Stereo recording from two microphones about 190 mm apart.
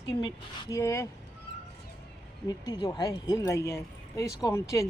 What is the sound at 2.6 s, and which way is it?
Speech, 20° left (ahead or behind).